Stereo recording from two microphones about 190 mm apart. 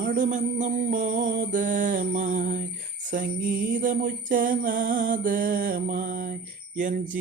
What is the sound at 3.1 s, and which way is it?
Mantra, 45° right (ahead or behind).